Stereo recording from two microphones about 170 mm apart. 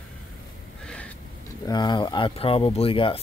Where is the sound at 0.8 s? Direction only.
5° left (ahead or behind).